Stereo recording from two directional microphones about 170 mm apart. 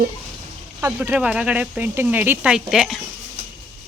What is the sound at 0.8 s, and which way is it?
Speech, 10° right (ahead or behind).